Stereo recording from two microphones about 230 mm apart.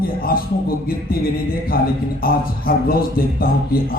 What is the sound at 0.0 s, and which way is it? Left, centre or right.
A man's voice, left.